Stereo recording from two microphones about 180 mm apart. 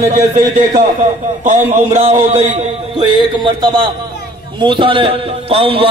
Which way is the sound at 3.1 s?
25° right (ahead or behind).